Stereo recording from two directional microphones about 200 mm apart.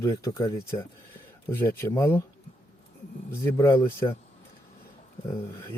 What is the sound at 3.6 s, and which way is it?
Speech, 15° left (ahead or behind).